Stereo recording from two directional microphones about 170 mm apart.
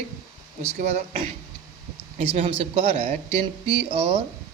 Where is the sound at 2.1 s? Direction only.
35° right (ahead or behind).